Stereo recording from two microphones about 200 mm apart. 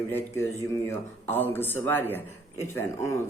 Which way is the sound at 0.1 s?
10° left (ahead or behind).